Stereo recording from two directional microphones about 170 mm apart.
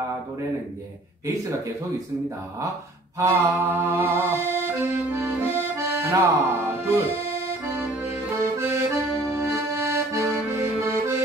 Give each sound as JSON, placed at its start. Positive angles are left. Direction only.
{"t": 3.2, "sound": "music", "side_deg": -15}
{"t": 8.5, "sound": "accordion", "side_deg": -15}